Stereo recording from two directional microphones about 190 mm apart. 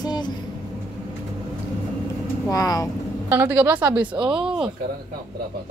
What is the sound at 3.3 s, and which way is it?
A woman's voice, 10° right (ahead or behind).